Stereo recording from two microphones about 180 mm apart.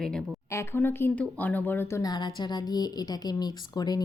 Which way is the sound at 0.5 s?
15° left (ahead or behind).